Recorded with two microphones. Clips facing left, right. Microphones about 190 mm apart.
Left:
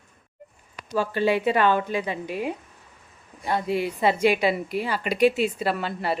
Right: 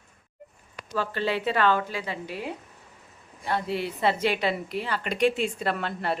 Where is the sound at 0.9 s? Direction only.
10° left (ahead or behind).